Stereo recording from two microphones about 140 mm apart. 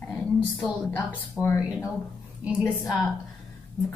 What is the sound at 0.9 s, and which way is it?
Speech, 15° left (ahead or behind).